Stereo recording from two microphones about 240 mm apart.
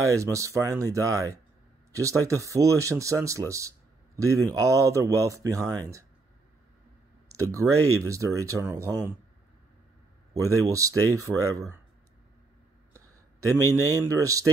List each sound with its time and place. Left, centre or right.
0.1 s speech: centre
7.6 s speech: centre
10.3 s speech: centre
12.9 s a man's voice: centre